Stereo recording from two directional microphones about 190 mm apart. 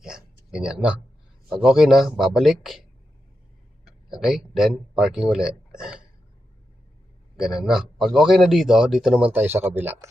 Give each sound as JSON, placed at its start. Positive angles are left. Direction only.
{"t": 0.5, "sound": "a man's voice", "side_deg": -5}
{"t": 3.8, "sound": "speech", "side_deg": 0}
{"t": 7.3, "sound": "a man's voice", "side_deg": -5}